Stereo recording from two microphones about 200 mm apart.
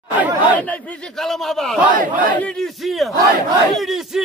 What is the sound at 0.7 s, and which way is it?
A man's voice, centre (ahead or behind).